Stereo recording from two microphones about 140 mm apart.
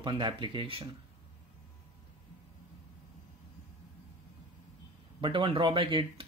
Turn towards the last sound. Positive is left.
turn(degrees=-40)  # may be behind; listen again after turning